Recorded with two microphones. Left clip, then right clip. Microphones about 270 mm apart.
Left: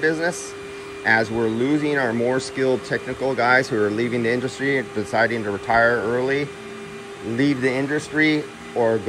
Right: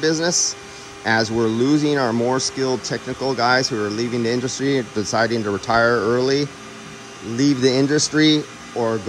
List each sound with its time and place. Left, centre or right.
0.0 s speech: centre